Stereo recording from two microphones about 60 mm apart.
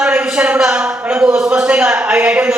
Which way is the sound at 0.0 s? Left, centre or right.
Centre.